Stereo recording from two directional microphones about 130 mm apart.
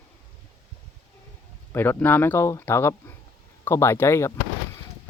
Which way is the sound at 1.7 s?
15° left (ahead or behind).